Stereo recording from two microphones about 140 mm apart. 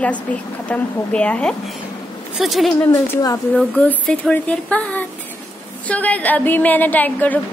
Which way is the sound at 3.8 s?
10° left (ahead or behind).